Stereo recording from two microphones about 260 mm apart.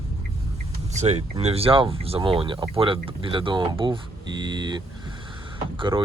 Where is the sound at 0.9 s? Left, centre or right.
Right.